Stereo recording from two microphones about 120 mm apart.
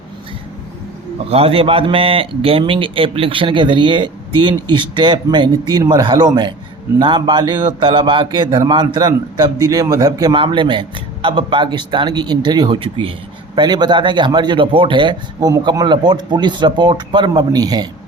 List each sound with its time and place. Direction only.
1.3 s a man's voice: 55° right (ahead or behind); by 10.3 s 30° right (ahead or behind)
10.3 s speech: 45° right (ahead or behind)